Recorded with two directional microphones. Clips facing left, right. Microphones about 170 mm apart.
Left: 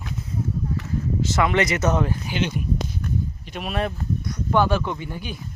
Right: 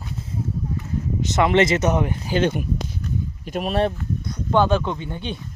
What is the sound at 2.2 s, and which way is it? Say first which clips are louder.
Speech: right 6 dB; 40° right (ahead or behind).